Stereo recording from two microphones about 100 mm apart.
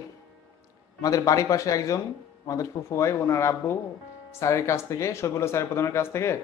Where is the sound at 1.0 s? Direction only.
35° left (ahead or behind).